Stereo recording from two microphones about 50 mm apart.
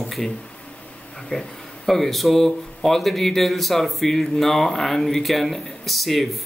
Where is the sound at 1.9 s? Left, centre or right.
Centre.